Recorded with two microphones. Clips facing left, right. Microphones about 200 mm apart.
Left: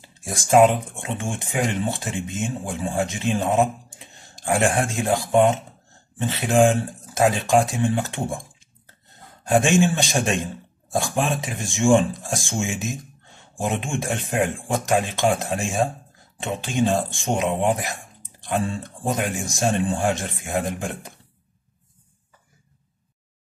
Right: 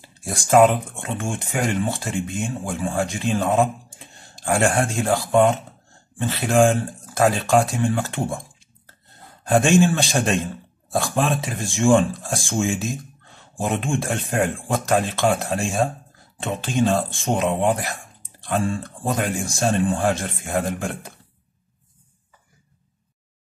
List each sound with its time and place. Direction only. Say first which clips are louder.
0.2 s speech: right 1 dB; 15° left (ahead or behind)
9.8 s speech: right 2 dB; 15° left (ahead or behind)